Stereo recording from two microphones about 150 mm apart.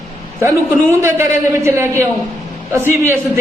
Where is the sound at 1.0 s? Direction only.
15° right (ahead or behind).